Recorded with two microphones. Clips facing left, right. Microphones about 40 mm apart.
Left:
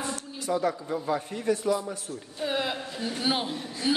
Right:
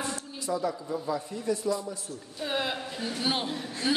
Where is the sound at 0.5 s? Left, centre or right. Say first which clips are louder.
Left 3 dB; left.